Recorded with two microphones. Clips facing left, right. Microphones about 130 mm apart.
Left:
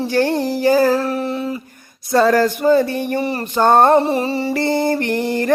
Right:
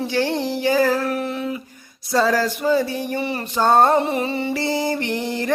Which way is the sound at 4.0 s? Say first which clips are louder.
Left 4 dB; 35° left (ahead or behind).